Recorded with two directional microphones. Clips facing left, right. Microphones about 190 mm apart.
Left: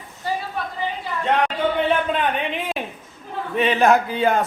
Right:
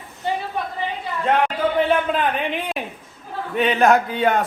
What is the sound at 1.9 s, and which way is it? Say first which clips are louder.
A man's voice: right 1 dB; centre (ahead or behind).